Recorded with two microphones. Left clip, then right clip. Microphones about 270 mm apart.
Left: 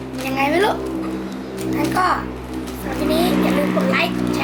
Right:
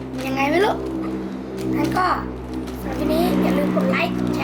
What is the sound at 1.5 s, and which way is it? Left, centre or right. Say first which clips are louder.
Speech: left 1 dB; centre.